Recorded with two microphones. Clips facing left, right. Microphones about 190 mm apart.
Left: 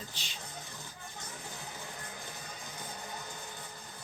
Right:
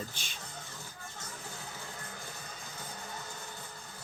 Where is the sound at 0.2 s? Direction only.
50° right (ahead or behind).